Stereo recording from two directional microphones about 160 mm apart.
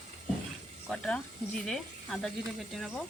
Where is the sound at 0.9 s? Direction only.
5° left (ahead or behind).